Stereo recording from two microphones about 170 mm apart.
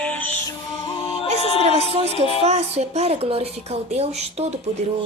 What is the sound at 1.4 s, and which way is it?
Music, 35° left (ahead or behind).